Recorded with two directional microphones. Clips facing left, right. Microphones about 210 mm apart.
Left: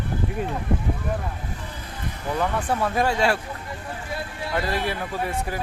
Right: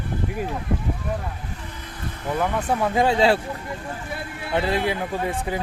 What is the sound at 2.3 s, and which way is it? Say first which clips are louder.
Speech: right 1 dB; 15° right (ahead or behind).